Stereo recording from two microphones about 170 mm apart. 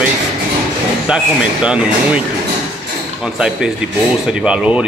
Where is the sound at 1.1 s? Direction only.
5° right (ahead or behind).